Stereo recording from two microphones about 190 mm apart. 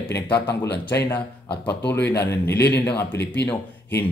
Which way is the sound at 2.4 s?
60° left (ahead or behind).